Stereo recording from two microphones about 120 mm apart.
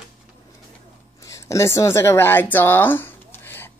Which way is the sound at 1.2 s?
25° left (ahead or behind).